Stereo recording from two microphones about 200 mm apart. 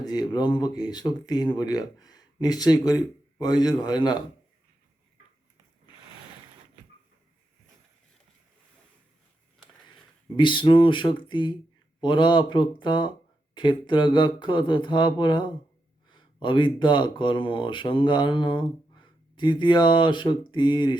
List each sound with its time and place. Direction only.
0.0 s speech: 20° left (ahead or behind)
10.3 s speech: 25° left (ahead or behind)